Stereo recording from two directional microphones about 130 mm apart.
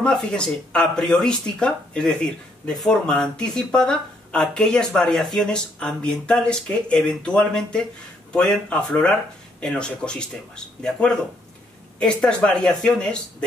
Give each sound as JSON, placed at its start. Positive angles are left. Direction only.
{"t": 0.0, "sound": "speech", "side_deg": 5}